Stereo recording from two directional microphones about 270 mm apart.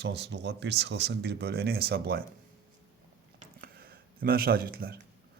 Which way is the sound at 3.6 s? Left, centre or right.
Right.